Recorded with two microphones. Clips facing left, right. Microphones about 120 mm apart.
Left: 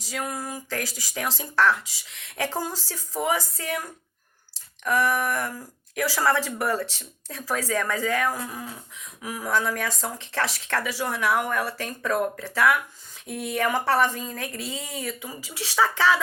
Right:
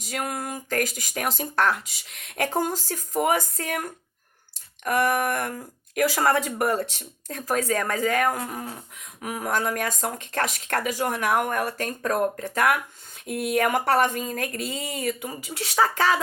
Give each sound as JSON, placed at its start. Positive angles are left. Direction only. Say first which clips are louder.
{"t": 0.1, "sound": "speech", "louder": "right 1 dB", "side_deg": -55}